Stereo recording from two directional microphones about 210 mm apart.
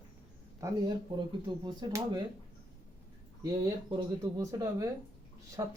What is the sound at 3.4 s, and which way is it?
Speech, 15° right (ahead or behind).